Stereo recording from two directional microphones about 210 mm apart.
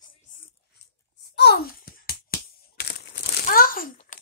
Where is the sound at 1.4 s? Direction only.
50° left (ahead or behind).